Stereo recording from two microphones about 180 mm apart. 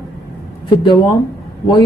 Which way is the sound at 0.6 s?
30° left (ahead or behind).